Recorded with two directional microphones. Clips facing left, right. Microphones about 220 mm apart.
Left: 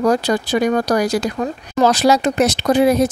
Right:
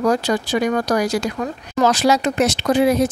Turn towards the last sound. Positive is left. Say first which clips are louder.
# left 2 dB
turn(degrees=40)  # may be behind; listen again after turning